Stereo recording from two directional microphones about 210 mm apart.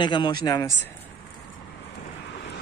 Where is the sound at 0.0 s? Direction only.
20° left (ahead or behind).